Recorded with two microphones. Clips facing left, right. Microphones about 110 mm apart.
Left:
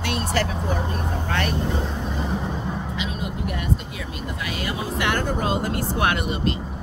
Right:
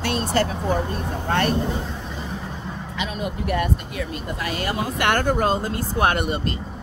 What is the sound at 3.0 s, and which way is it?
Speech, 55° right (ahead or behind).